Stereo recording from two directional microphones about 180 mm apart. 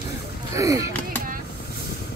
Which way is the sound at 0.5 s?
20° right (ahead or behind).